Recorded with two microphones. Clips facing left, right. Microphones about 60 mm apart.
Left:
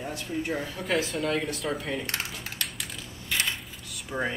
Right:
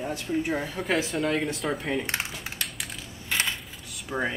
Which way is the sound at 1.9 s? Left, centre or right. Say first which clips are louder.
Right 3 dB; centre.